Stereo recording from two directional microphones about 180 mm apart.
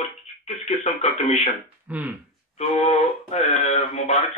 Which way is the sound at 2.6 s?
35° left (ahead or behind).